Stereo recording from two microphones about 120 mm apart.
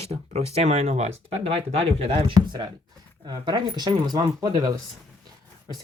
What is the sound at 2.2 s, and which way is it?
Speech, 40° right (ahead or behind).